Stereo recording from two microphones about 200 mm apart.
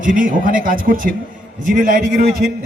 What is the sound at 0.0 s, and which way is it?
A man's voice, 45° right (ahead or behind).